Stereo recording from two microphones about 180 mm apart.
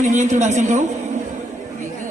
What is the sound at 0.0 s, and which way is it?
Speech, 40° right (ahead or behind).